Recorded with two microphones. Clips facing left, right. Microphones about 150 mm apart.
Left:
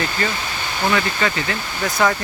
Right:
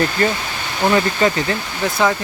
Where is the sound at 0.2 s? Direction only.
45° right (ahead or behind).